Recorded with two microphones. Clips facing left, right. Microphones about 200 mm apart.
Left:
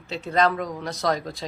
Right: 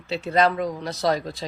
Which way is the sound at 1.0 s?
30° right (ahead or behind).